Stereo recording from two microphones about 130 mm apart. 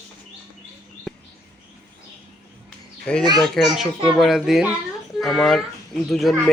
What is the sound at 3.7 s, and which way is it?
Speech, 5° right (ahead or behind).